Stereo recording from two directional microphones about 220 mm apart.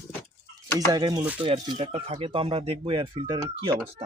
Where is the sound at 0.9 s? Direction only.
20° right (ahead or behind).